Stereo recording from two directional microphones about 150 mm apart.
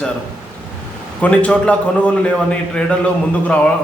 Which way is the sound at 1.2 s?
10° left (ahead or behind).